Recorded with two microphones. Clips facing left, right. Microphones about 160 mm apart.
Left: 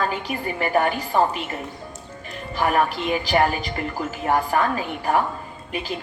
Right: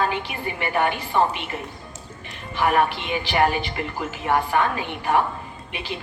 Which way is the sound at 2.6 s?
40° left (ahead or behind).